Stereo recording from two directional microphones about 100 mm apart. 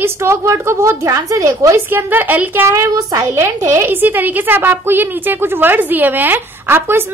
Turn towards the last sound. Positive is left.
turn(degrees=-25)  # may be behind; listen again after turning